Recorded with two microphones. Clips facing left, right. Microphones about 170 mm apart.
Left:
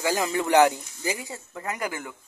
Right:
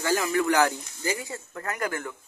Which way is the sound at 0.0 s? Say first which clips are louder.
Right 1 dB; 20° left (ahead or behind).